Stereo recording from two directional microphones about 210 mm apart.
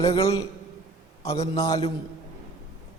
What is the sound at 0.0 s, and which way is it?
A man's voice, 25° left (ahead or behind).